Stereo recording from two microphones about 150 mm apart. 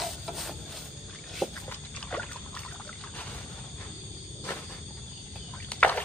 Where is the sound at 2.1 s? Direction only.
5° left (ahead or behind).